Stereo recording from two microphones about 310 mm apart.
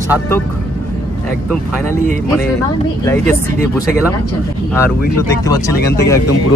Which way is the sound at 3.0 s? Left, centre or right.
Centre.